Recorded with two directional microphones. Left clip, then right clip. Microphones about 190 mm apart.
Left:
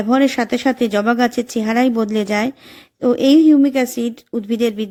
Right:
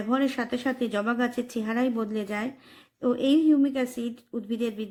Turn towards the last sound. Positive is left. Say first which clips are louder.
# left 12 dB
turn(degrees=35)  # may be behind; listen again after turning